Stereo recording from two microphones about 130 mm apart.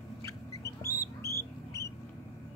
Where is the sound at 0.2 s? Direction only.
25° left (ahead or behind).